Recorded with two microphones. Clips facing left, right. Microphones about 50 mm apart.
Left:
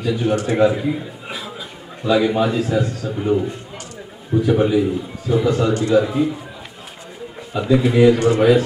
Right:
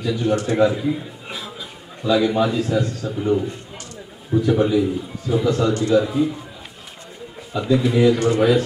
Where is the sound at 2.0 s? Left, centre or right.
Centre.